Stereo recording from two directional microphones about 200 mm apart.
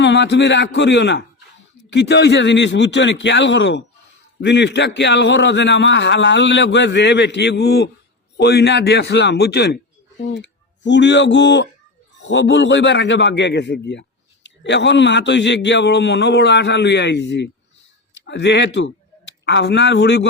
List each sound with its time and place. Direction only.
0.0 s a man's voice: 60° left (ahead or behind)